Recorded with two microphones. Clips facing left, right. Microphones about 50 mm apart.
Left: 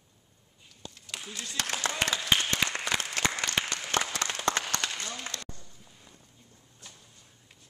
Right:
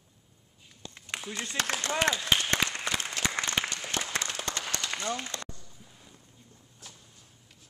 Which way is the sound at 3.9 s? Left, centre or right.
Left.